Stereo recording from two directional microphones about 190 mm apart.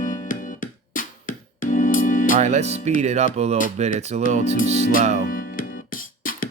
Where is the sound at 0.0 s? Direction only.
45° left (ahead or behind).